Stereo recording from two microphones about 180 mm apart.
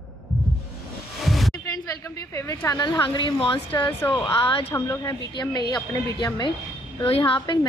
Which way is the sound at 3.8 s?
20° left (ahead or behind).